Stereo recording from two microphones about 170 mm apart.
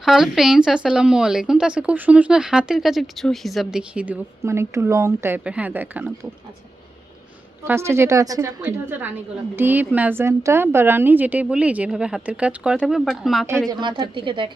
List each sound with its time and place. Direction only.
0.0 s a woman's voice: centre (ahead or behind)
7.6 s a woman's voice: 15° right (ahead or behind)
13.7 s a woman's voice: 25° right (ahead or behind)